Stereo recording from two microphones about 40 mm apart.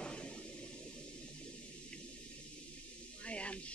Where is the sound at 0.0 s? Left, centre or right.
Left.